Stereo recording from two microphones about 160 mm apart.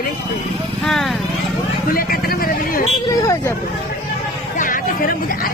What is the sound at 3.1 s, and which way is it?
Vehicle, 20° left (ahead or behind).